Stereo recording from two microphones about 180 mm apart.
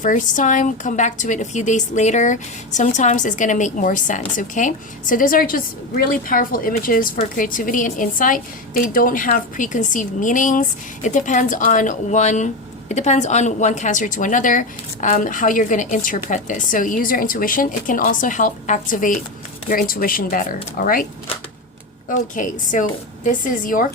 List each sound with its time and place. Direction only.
0.0 s a woman's voice: 45° left (ahead or behind)
22.1 s a woman's voice: 45° left (ahead or behind)